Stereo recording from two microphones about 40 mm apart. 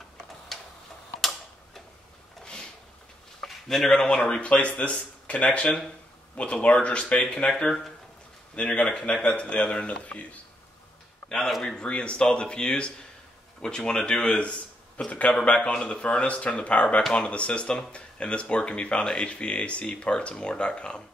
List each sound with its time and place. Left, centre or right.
0.5 s tick-tock: centre
3.4 s a sound: centre
3.9 s speech: left
11.2 s a man's voice: centre
11.7 s speech: left
15.0 s speech: left